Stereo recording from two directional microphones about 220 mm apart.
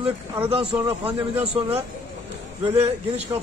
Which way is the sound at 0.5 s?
25° right (ahead or behind).